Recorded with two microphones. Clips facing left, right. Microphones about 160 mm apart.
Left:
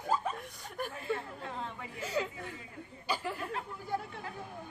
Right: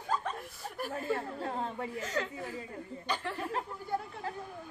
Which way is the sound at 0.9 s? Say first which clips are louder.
Right 6 dB; 40° right (ahead or behind).